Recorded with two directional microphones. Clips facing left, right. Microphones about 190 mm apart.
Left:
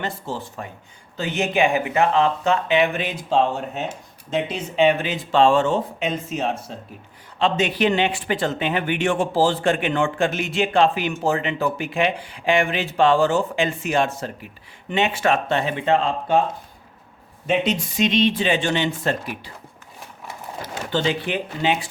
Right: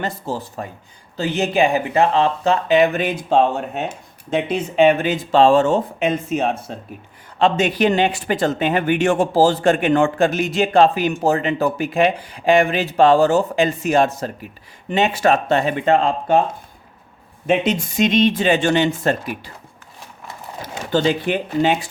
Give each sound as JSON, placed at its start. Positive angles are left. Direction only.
{"t": 0.0, "sound": "speech", "side_deg": -40}
{"t": 17.4, "sound": "speech", "side_deg": -50}
{"t": 20.9, "sound": "speech", "side_deg": -45}